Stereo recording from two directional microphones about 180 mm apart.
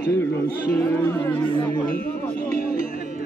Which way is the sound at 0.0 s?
10° left (ahead or behind).